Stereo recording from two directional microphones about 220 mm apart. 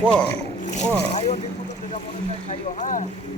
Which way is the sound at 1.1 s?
30° left (ahead or behind).